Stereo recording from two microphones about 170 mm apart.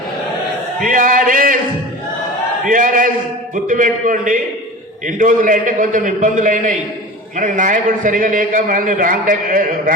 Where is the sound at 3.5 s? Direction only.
50° right (ahead or behind).